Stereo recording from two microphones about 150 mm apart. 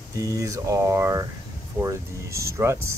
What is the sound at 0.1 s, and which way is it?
Speech, 20° right (ahead or behind).